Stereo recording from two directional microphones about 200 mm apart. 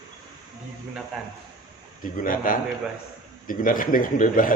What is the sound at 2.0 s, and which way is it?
Speech, 45° left (ahead or behind).